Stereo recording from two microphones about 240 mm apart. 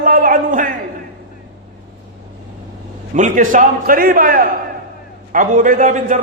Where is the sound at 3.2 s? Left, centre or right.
Right.